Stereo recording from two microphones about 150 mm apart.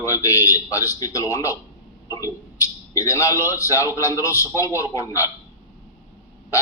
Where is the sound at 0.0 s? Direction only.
20° left (ahead or behind).